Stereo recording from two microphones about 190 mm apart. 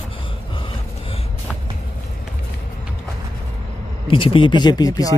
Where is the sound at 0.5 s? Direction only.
25° left (ahead or behind).